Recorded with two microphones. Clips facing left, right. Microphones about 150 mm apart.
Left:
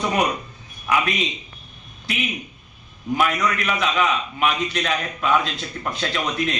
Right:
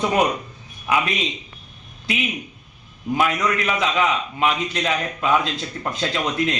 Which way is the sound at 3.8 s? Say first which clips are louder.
Right 1 dB; 25° right (ahead or behind).